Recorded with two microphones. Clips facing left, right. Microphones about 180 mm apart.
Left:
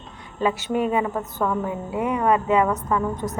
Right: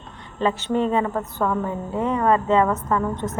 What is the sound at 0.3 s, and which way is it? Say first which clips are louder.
A woman's voice: right 1 dB; 10° left (ahead or behind).